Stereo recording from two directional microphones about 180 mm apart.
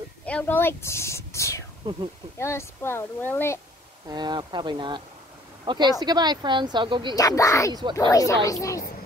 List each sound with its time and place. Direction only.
0.2 s speech: 10° left (ahead or behind)
4.1 s speech: 25° right (ahead or behind)
7.2 s speech: 20° left (ahead or behind)